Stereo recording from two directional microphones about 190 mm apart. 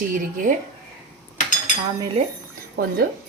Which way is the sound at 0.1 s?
45° right (ahead or behind).